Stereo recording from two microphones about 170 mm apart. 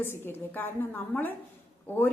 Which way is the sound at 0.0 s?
10° left (ahead or behind).